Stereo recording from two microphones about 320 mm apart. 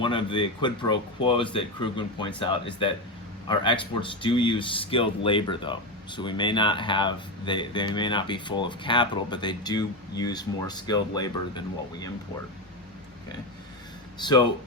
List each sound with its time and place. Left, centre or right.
0.0 s speech: centre
14.2 s speech: centre